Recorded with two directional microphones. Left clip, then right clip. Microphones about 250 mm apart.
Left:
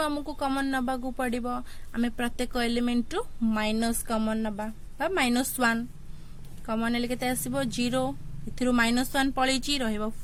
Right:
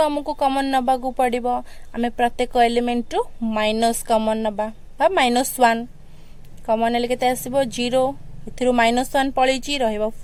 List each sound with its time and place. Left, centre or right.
0.0 s speech: centre